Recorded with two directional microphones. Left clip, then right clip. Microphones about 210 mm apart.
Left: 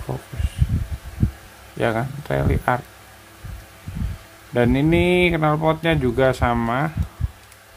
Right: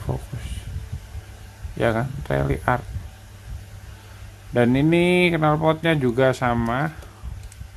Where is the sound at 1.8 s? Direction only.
5° right (ahead or behind).